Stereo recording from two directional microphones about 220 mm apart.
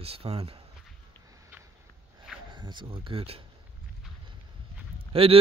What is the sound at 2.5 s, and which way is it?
Speech, 20° right (ahead or behind).